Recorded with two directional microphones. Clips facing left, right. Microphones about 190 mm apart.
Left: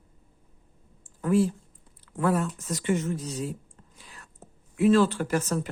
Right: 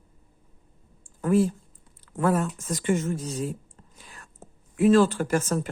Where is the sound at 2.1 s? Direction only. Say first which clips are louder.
Right 2 dB; 45° right (ahead or behind).